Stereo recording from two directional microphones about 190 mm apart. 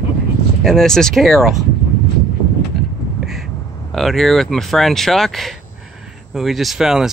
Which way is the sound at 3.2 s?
Centre (ahead or behind).